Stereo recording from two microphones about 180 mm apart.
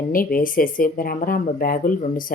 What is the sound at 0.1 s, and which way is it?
Speech, 50° left (ahead or behind).